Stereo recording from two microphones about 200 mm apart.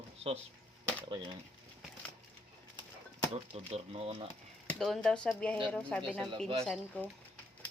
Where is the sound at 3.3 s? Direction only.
30° right (ahead or behind).